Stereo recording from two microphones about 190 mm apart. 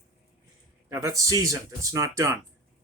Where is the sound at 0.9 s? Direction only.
15° right (ahead or behind).